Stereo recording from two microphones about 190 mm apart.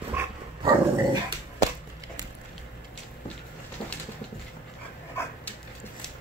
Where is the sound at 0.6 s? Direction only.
20° right (ahead or behind).